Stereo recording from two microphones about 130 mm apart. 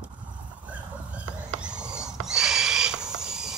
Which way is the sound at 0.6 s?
10° right (ahead or behind).